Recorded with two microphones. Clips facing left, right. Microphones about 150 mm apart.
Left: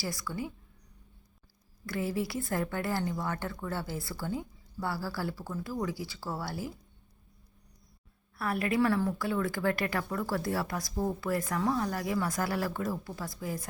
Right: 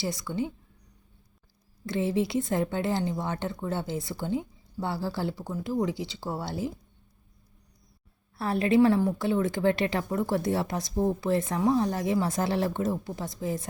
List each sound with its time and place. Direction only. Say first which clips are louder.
0.0 s a woman's voice: right 5 dB; 20° right (ahead or behind)
1.9 s a woman's voice: right 6 dB; 25° right (ahead or behind)
8.4 s a woman's voice: right 6 dB; 25° right (ahead or behind)